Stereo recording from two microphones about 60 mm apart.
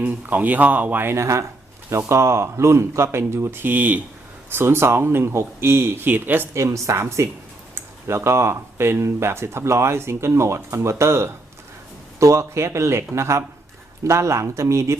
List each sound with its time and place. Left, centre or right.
0.0 s speech: right
1.1 s speech: right
4.5 s speech: right
6.5 s speech: right